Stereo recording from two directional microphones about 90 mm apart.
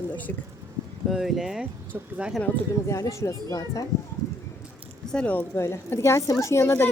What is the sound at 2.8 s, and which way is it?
Speech, 35° left (ahead or behind).